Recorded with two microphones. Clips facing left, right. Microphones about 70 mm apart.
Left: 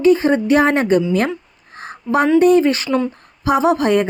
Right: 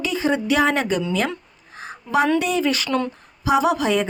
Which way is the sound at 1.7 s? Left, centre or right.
Left.